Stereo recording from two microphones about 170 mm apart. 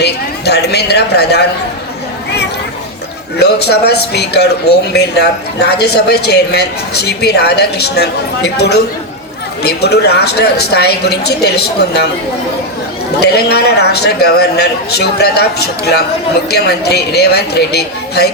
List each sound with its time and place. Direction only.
0.0 s a woman's voice: 75° left (ahead or behind)
3.3 s a woman's voice: 75° left (ahead or behind)
13.2 s a woman's voice: 70° left (ahead or behind)